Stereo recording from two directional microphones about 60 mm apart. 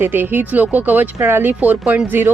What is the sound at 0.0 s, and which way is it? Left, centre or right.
Speech, right.